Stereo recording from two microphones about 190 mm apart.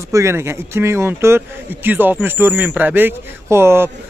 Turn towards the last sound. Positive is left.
turn(degrees=-15)  # may be behind; listen again after turning